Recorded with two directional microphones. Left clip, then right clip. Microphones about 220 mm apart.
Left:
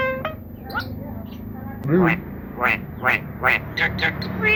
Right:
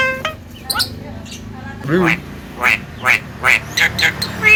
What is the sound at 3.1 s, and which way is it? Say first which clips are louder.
Vehicle: right 6 dB; 10° left (ahead or behind).